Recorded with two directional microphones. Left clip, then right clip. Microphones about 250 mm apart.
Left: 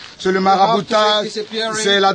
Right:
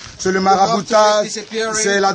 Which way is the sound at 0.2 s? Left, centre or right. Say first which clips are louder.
Even; centre.